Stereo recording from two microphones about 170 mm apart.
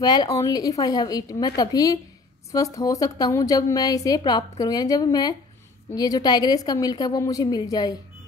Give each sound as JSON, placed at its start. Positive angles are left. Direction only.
{"t": 0.0, "sound": "a woman's voice", "side_deg": 25}